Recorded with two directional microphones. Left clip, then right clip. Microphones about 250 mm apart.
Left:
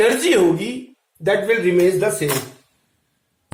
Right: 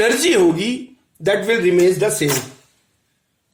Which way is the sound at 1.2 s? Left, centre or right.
Right.